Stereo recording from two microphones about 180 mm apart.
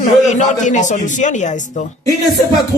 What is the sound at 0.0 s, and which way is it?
A man's voice, 45° left (ahead or behind).